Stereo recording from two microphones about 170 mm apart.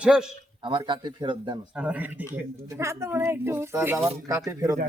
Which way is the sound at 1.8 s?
5° right (ahead or behind).